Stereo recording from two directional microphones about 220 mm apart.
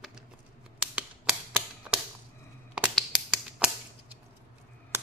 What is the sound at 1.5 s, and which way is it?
Typewriter, 5° right (ahead or behind).